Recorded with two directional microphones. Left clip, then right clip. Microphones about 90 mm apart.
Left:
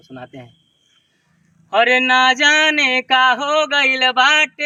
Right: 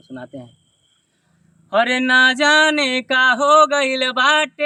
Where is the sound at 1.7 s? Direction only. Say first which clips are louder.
Left 2 dB; 45° right (ahead or behind).